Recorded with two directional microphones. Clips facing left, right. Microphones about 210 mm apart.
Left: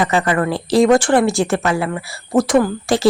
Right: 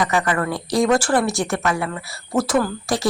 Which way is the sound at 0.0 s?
25° left (ahead or behind).